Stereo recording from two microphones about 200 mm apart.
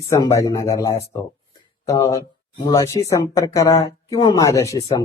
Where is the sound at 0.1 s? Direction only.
15° left (ahead or behind).